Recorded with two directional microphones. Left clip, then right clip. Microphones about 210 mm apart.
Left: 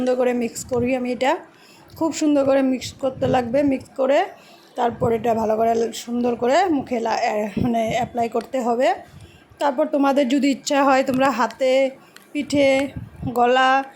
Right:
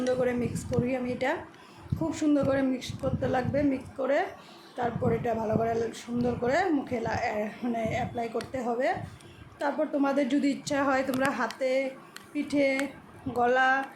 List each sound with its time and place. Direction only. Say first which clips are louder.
0.1 s a woman's voice: left 8 dB; 35° left (ahead or behind)